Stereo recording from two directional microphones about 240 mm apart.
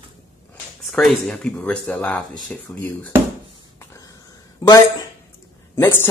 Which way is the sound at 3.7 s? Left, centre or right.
Centre.